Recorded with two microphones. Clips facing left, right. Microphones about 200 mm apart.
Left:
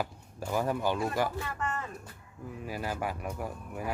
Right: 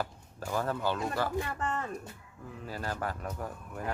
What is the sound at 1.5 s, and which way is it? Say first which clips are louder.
Speech: right 2 dB; 30° right (ahead or behind).